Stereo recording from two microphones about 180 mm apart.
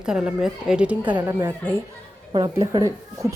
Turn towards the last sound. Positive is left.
turn(degrees=-20)  # may be behind; listen again after turning